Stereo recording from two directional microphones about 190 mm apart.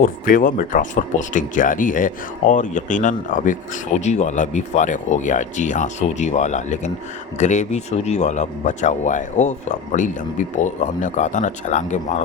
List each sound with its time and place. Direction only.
0.0 s speech: 45° left (ahead or behind)